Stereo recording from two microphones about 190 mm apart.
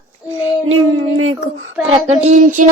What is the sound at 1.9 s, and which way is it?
Child singing, 30° right (ahead or behind).